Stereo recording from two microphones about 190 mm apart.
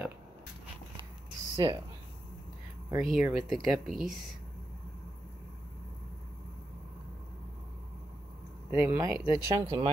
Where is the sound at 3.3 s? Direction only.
Centre (ahead or behind).